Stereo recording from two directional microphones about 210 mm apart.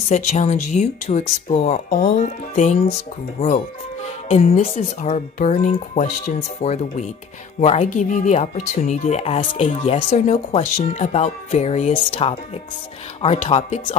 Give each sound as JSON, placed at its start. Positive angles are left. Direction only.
{"t": 0.1, "sound": "speech", "side_deg": 35}